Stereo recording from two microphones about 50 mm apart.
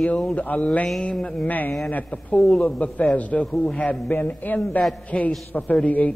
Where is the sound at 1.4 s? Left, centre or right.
Left.